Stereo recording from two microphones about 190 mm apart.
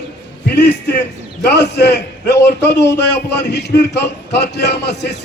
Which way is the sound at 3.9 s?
60° left (ahead or behind).